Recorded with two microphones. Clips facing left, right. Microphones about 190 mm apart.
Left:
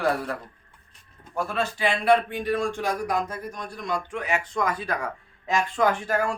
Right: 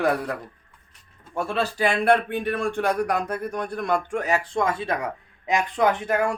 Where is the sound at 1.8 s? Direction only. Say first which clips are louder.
Right 1 dB; 50° right (ahead or behind); by 6.4 s 20° right (ahead or behind).